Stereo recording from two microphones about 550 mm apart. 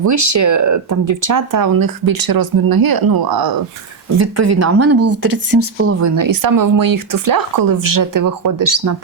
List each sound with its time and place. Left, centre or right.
0.0 s speech: right
4.2 s speech: right